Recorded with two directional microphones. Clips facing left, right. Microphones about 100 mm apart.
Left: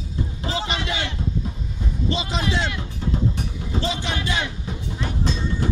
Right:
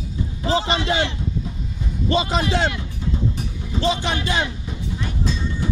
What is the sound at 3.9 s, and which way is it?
Speech, 55° right (ahead or behind).